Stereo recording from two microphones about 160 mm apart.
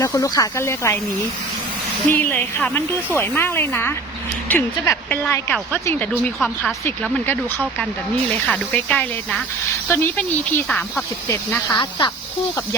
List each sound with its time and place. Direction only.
0.0 s speech: 20° left (ahead or behind)
2.0 s speech: 10° left (ahead or behind)
11.7 s speech: 30° left (ahead or behind)